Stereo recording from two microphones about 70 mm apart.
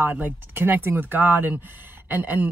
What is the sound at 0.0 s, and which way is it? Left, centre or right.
Speech, right.